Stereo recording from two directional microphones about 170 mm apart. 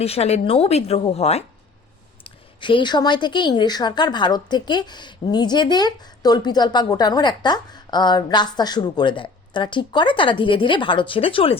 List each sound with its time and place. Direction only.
0.0 s a woman's voice: 35° left (ahead or behind)